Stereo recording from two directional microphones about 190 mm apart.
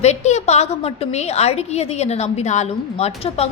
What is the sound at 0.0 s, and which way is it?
A woman's voice, 35° left (ahead or behind).